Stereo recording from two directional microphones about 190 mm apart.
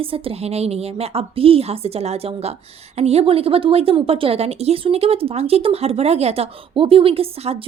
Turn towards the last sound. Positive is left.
turn(degrees=-30)  # may be behind; listen again after turning